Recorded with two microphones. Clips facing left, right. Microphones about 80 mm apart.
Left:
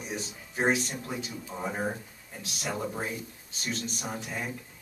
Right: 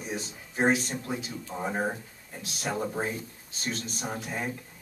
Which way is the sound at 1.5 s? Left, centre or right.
Centre.